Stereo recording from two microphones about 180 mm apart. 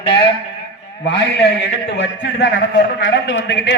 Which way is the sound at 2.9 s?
75° left (ahead or behind).